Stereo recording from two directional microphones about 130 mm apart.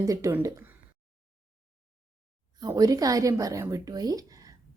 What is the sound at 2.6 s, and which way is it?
A woman's voice, 30° right (ahead or behind).